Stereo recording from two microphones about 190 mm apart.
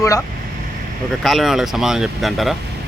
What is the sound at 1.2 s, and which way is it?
Speech, centre (ahead or behind).